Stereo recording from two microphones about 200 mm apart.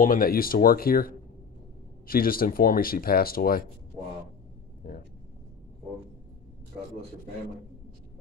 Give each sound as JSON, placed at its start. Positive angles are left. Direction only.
{"t": 0.0, "sound": "speech", "side_deg": 45}